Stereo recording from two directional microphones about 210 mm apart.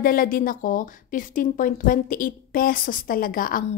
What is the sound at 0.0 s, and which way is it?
A woman's voice, 45° left (ahead or behind).